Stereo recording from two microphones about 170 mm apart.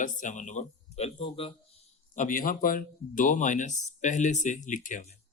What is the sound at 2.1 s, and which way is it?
Speech, 55° left (ahead or behind).